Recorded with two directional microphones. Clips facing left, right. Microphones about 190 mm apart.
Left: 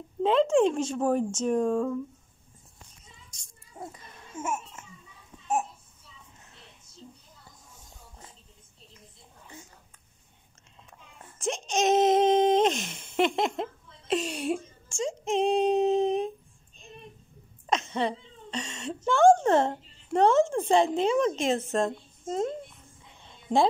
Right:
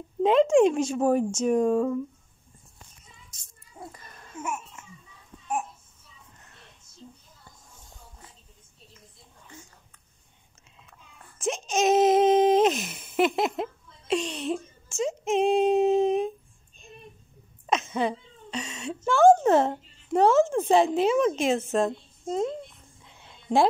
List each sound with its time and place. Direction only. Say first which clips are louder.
0.2 s speech: right 3 dB; 10° right (ahead or behind)
3.3 s a sound: left 1 dB; centre (ahead or behind)
4.4 s babbling: left 1 dB; 25° left (ahead or behind)
11.3 s speech: right 2 dB; centre (ahead or behind)
14.9 s speech: right 3 dB; 5° right (ahead or behind)
15.3 s female singing: right 2 dB; 5° right (ahead or behind)
17.6 s speech: right 2 dB; 5° right (ahead or behind)
23.1 s a sound: right 2 dB; 5° right (ahead or behind)